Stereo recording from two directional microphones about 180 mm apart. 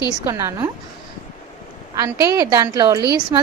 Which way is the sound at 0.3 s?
20° right (ahead or behind).